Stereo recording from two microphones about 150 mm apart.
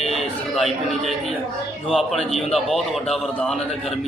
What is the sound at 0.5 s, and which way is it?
Speech, centre (ahead or behind).